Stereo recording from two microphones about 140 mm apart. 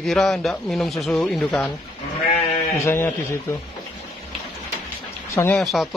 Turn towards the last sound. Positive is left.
turn(degrees=0)  # may be behind; listen again after turning